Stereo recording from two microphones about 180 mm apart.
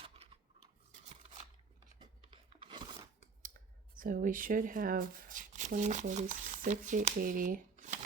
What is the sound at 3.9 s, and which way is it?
Speech, 50° right (ahead or behind).